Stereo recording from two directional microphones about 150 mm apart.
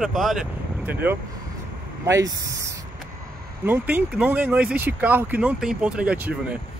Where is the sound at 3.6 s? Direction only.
10° right (ahead or behind).